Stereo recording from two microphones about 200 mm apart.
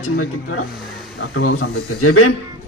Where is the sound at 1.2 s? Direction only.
90° left.